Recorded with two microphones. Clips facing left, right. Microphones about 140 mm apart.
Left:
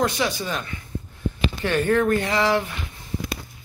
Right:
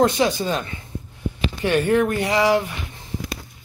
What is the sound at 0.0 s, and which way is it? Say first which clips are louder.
Speech: right 5 dB; 25° right (ahead or behind).